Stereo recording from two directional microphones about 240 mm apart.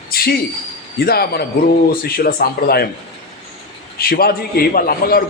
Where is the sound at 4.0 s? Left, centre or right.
Left.